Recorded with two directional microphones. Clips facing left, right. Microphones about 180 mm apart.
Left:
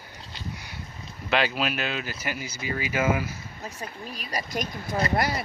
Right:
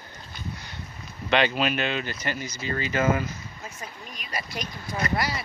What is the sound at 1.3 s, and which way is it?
Speech, 5° left (ahead or behind).